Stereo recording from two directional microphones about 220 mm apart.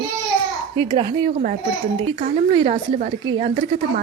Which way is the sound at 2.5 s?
25° right (ahead or behind).